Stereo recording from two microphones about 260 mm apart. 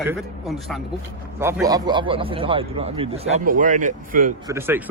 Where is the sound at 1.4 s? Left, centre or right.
Centre; by 4.3 s right.